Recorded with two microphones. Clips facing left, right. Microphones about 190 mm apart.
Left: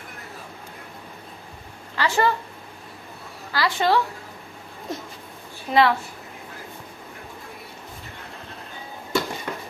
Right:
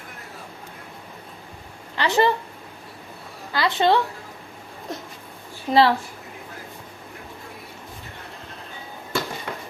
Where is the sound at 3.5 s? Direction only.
20° right (ahead or behind).